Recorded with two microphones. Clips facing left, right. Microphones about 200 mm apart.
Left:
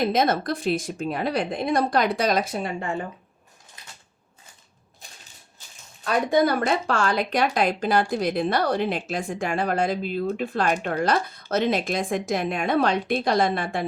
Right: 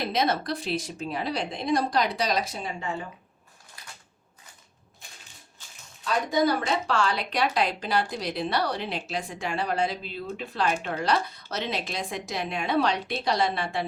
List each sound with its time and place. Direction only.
0.0 s speech: 50° left (ahead or behind)
6.1 s speech: 60° left (ahead or behind)